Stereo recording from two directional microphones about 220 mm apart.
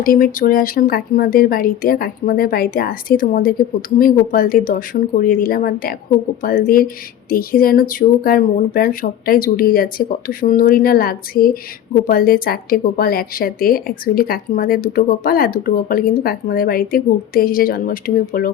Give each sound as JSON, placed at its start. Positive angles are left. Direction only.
{"t": 0.0, "sound": "speech", "side_deg": 40}